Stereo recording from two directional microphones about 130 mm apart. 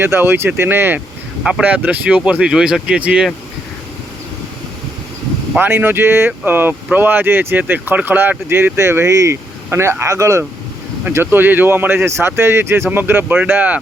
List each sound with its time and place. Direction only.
0.0 s speech: 15° right (ahead or behind)
5.5 s speech: 15° right (ahead or behind)